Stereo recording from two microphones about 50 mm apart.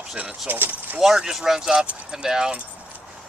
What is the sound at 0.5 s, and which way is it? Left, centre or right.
Speech, right.